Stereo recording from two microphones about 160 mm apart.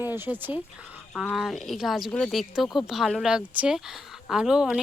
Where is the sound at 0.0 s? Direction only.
10° right (ahead or behind).